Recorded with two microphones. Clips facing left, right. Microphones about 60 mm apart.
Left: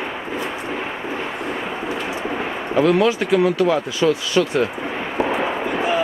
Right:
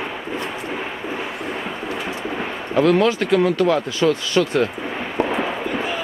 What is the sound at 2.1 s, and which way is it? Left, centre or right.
Artillery fire, centre.